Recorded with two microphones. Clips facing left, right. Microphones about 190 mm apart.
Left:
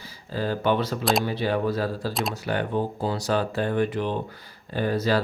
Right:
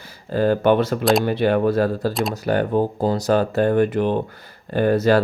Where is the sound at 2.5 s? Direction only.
45° right (ahead or behind).